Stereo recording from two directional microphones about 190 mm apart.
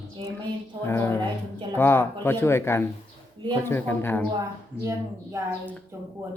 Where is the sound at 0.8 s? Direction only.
10° left (ahead or behind).